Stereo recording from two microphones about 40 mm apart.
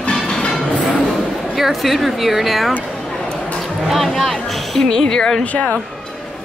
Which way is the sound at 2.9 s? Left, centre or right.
Centre.